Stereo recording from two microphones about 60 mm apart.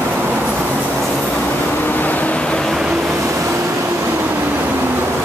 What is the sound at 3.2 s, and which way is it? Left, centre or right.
Vehicle, right.